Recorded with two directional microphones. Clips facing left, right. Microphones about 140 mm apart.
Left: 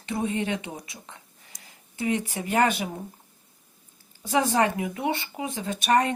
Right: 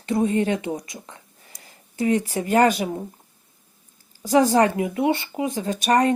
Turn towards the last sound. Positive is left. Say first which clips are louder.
# right 4 dB
turn(degrees=-35)  # may be behind; listen again after turning